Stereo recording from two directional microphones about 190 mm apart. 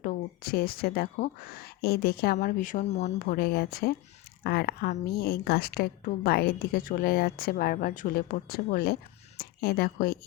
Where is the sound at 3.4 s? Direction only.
55° left (ahead or behind).